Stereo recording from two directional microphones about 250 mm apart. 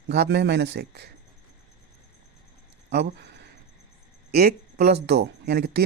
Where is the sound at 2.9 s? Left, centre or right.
Right.